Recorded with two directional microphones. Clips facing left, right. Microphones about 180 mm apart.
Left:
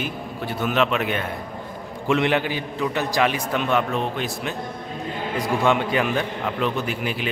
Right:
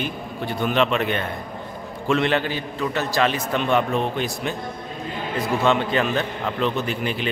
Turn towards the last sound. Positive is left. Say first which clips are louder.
# right 1 dB
turn(degrees=5)  # may be behind; listen again after turning